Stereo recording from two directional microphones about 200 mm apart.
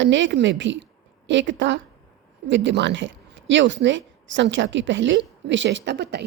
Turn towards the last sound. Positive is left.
turn(degrees=-60)  # may be behind; listen again after turning